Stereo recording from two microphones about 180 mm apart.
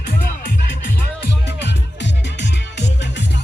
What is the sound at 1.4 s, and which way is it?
Music, 75° left (ahead or behind).